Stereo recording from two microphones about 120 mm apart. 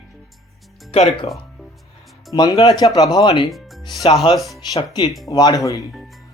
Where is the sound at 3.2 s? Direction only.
45° left (ahead or behind).